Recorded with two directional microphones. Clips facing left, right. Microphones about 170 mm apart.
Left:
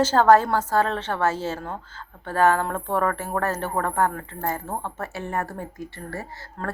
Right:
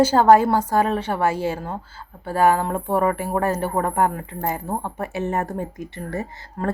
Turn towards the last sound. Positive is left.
turn(degrees=-20)  # may be behind; listen again after turning